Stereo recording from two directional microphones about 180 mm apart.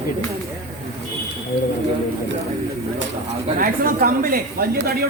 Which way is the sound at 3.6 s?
55° right (ahead or behind).